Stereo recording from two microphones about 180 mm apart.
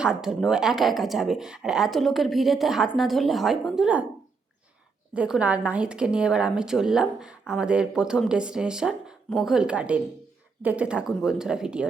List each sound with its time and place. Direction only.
0.0 s a woman's voice: 5° right (ahead or behind)
5.1 s a woman's voice: 5° right (ahead or behind)